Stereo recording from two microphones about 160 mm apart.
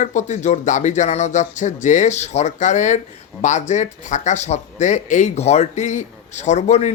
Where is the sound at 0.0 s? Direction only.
50° left (ahead or behind).